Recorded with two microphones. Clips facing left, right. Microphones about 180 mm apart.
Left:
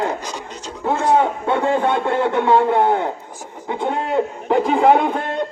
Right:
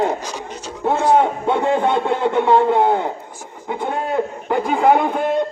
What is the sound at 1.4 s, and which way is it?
A man's voice, 15° right (ahead or behind).